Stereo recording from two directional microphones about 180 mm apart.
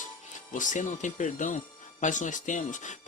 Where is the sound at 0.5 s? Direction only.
45° left (ahead or behind).